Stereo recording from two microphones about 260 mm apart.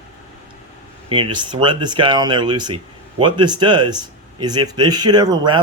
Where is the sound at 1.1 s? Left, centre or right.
Centre.